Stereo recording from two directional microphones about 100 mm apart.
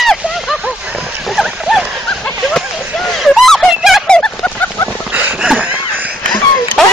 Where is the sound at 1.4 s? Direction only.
Centre (ahead or behind).